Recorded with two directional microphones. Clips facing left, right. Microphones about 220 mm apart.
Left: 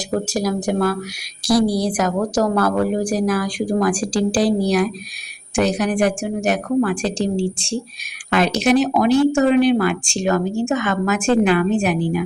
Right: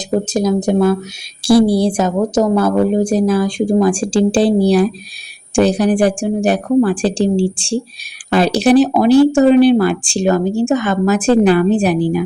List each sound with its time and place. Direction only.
0.3 s a woman's voice: 20° right (ahead or behind)